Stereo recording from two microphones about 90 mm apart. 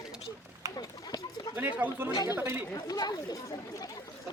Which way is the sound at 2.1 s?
45° left (ahead or behind).